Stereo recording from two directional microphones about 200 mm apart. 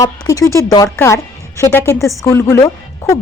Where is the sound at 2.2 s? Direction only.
15° left (ahead or behind).